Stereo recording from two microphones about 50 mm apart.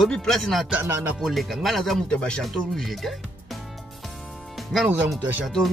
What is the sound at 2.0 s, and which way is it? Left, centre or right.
Speech, left.